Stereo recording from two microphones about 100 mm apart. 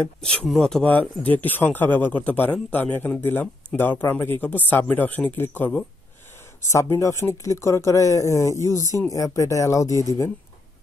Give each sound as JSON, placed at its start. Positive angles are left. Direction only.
{"t": 0.2, "sound": "speech", "side_deg": 5}
{"t": 0.9, "sound": "a man's voice", "side_deg": 15}
{"t": 6.6, "sound": "speech", "side_deg": 30}